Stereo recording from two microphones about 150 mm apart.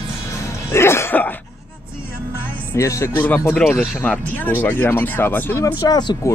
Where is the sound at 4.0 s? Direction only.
10° left (ahead or behind).